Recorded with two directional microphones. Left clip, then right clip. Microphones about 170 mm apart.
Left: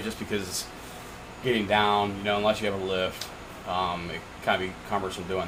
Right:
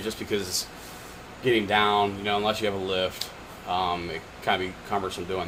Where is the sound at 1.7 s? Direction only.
55° right (ahead or behind).